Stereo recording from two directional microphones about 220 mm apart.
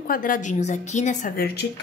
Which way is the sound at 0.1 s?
35° left (ahead or behind).